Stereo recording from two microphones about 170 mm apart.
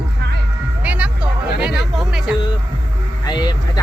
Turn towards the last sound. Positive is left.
turn(degrees=25)  # may be behind; listen again after turning